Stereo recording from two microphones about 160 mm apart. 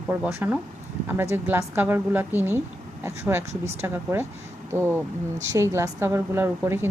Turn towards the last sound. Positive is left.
turn(degrees=-15)  # may be behind; listen again after turning